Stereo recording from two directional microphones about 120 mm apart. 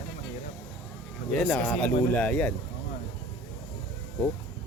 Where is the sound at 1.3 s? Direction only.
10° left (ahead or behind).